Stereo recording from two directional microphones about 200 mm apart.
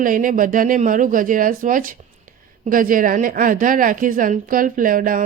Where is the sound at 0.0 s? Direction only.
45° right (ahead or behind).